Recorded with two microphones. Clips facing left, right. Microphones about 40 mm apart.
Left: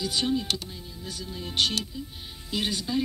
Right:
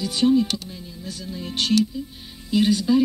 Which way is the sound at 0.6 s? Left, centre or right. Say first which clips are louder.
Right 4 dB; centre.